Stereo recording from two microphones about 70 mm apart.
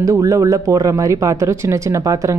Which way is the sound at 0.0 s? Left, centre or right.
Right.